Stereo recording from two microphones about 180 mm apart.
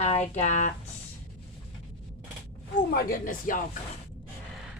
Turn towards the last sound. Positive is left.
turn(degrees=50)  # may be behind; listen again after turning